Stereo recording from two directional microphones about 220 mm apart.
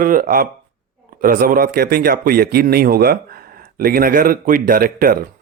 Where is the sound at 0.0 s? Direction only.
40° right (ahead or behind).